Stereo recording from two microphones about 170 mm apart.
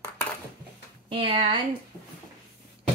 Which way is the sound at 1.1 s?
30° right (ahead or behind).